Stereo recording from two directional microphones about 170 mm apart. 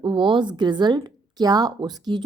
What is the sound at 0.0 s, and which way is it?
A woman's voice, 30° right (ahead or behind).